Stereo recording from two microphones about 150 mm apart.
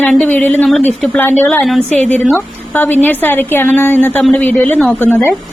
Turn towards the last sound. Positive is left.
turn(degrees=10)  # may be behind; listen again after turning